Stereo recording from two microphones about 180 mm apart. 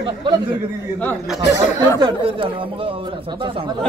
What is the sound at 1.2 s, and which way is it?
Speech, centre (ahead or behind).